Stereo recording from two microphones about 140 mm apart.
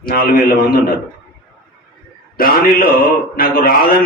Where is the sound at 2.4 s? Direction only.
90° left.